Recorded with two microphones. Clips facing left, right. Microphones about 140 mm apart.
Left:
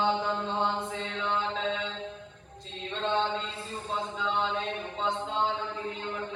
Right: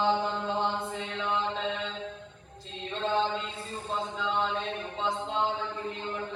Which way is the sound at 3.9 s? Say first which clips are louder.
Even; centre (ahead or behind).